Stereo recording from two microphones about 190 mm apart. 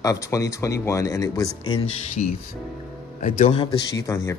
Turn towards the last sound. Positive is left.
turn(degrees=15)  # may be behind; listen again after turning